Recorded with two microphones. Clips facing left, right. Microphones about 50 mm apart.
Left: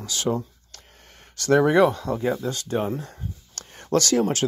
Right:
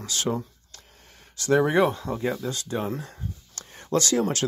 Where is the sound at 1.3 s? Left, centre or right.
Left.